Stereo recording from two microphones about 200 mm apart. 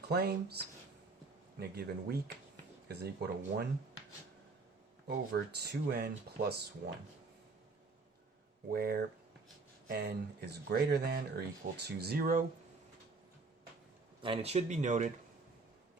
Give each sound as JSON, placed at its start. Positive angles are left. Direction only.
{"t": 0.1, "sound": "speech", "side_deg": -50}
{"t": 5.0, "sound": "speech", "side_deg": -55}
{"t": 8.7, "sound": "speech", "side_deg": -50}
{"t": 14.2, "sound": "speech", "side_deg": -25}